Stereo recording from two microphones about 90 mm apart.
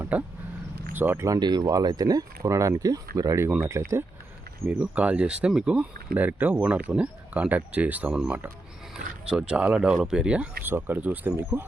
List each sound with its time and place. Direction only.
0.0 s speech: 20° right (ahead or behind)
1.4 s speech: 55° right (ahead or behind); by 4.0 s 30° right (ahead or behind)
4.8 s speech: 15° right (ahead or behind)